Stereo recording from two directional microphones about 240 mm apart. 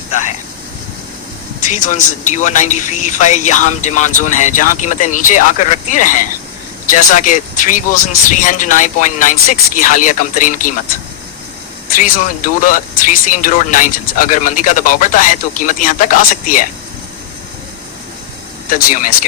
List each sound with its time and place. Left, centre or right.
0.1 s vehicle: left
1.7 s speech: left
11.9 s speech: left
18.7 s speech: left